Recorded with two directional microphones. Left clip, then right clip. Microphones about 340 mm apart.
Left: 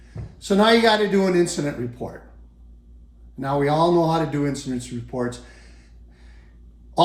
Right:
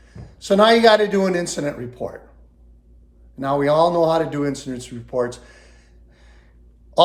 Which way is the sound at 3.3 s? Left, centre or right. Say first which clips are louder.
Right 4 dB; centre.